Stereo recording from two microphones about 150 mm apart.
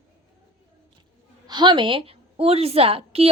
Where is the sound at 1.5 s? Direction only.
30° right (ahead or behind).